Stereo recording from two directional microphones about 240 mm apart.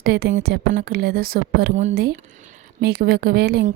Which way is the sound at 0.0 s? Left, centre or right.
Right.